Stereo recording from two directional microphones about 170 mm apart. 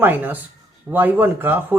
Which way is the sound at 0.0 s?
10° right (ahead or behind).